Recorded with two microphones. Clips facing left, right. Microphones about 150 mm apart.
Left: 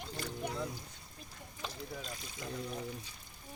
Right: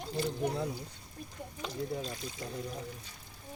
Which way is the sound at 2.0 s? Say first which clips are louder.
Right 6 dB; 35° right (ahead or behind).